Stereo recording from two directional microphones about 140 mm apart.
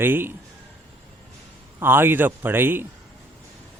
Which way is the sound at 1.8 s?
15° right (ahead or behind).